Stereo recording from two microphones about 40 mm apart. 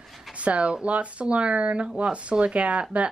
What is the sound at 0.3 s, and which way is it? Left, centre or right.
Speech, right.